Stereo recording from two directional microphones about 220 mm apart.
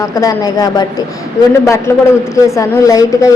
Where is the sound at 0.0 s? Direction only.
15° left (ahead or behind).